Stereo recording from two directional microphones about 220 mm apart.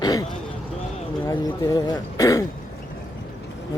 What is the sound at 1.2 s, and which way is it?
Speech, 15° left (ahead or behind).